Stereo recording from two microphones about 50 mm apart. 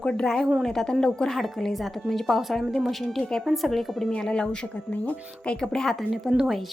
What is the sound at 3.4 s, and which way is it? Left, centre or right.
Speech, centre.